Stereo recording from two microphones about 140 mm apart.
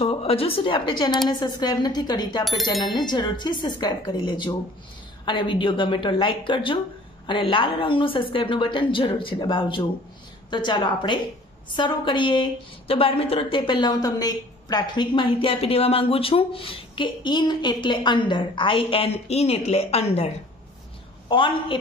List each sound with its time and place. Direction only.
0.0 s a woman's voice: 45° left (ahead or behind)
21.3 s a woman's voice: 35° left (ahead or behind)